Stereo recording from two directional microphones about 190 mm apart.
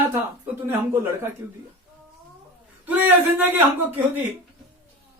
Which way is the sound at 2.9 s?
10° right (ahead or behind).